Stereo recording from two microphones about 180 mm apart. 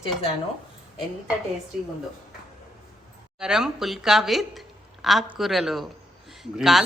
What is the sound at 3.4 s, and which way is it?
A woman's voice, 5° right (ahead or behind).